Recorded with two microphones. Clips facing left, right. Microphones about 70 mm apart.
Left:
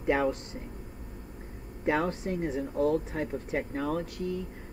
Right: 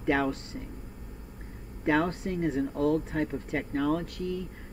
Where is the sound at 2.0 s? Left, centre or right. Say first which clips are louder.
Right 1 dB; right.